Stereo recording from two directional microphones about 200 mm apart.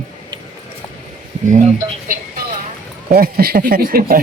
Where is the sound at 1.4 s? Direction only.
40° right (ahead or behind).